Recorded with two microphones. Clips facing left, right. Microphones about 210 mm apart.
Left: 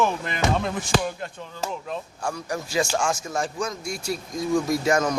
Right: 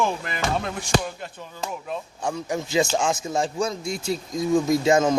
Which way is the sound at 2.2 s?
20° right (ahead or behind).